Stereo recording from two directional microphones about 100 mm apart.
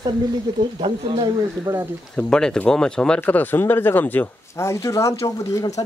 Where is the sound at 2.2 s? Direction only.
5° left (ahead or behind).